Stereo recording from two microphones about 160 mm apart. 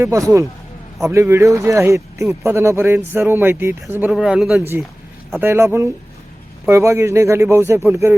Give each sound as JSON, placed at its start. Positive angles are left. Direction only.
{"t": 0.0, "sound": "speech", "side_deg": -20}
{"t": 5.4, "sound": "speech", "side_deg": -15}